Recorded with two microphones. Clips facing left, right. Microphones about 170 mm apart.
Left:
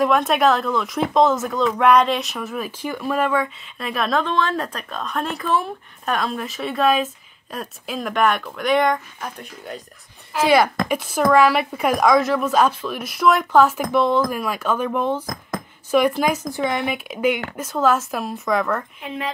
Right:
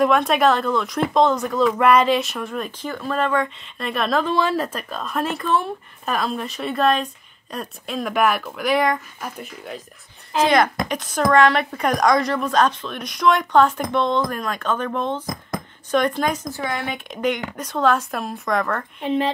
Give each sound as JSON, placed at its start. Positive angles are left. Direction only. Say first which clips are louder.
{"t": 0.0, "sound": "speech", "louder": "even", "side_deg": 0}
{"t": 10.4, "sound": "a woman's voice", "louder": "left 1 dB", "side_deg": 10}
{"t": 16.9, "sound": "a woman's voice", "louder": "left 2 dB", "side_deg": 5}
{"t": 18.9, "sound": "speech", "louder": "right 7 dB", "side_deg": -30}